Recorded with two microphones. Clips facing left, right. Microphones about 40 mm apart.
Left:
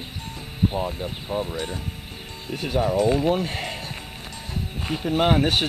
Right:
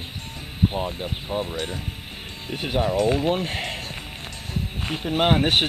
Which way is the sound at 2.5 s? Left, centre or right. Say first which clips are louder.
Left 1 dB; right.